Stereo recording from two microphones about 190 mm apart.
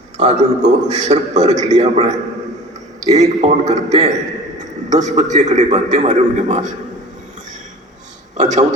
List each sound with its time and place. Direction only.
0.2 s a man's voice: 35° right (ahead or behind)
8.4 s a man's voice: 40° right (ahead or behind)